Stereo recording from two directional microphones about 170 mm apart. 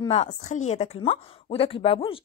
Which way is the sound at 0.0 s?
35° left (ahead or behind).